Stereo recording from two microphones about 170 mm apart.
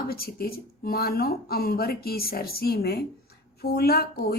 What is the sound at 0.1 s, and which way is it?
A woman's voice, 60° left (ahead or behind).